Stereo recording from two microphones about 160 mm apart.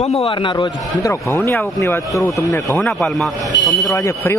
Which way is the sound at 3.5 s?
90° left.